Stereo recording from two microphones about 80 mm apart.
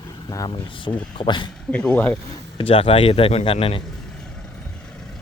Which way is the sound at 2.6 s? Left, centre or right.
Left.